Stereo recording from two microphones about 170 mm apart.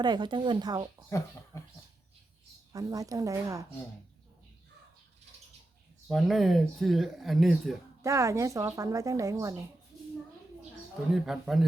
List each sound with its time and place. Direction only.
0.0 s a woman's voice: 25° right (ahead or behind)
2.7 s a woman's voice: 20° right (ahead or behind)
6.1 s speech: centre (ahead or behind)
8.0 s a woman's voice: 15° right (ahead or behind)
11.1 s speech: centre (ahead or behind)